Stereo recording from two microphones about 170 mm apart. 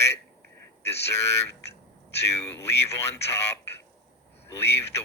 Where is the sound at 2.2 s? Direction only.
15° left (ahead or behind).